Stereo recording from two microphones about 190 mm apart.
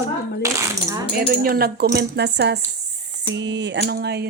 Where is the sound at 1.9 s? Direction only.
60° right (ahead or behind).